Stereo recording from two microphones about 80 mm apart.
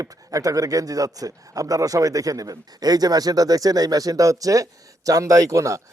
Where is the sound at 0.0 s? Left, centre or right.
Right.